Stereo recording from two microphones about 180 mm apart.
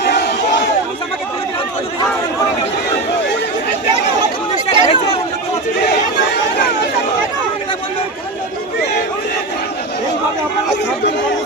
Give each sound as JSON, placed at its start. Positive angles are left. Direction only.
{"t": 0.0, "sound": "crowd", "side_deg": 70}
{"t": 4.8, "sound": "chatter", "side_deg": 35}